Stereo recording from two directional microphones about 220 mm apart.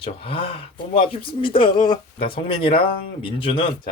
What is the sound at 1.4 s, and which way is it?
Speech, 25° left (ahead or behind).